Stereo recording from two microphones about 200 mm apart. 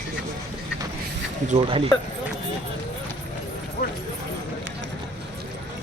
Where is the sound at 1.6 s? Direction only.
25° right (ahead or behind).